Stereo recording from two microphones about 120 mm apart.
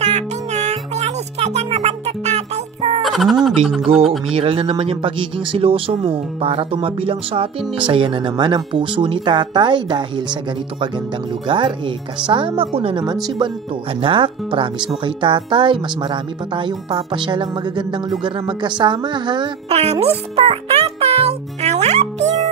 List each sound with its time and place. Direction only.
0.0 s music: 70° right (ahead or behind)
3.0 s speech: centre (ahead or behind)
4.4 s speech: 50° right (ahead or behind)
11.4 s speech: 45° right (ahead or behind)
14.0 s speech: 45° right (ahead or behind)
19.7 s a child's voice: 60° right (ahead or behind)